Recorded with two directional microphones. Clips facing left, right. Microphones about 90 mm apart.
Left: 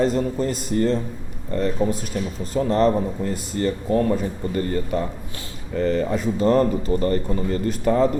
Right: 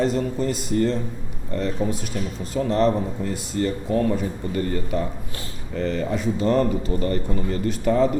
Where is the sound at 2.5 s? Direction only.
40° left (ahead or behind).